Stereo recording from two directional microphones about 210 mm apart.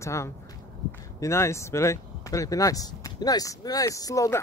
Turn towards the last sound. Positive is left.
turn(degrees=15)  # may be behind; listen again after turning